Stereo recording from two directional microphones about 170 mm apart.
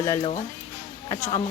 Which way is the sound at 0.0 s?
15° left (ahead or behind).